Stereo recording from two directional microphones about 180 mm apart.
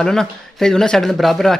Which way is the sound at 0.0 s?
5° left (ahead or behind).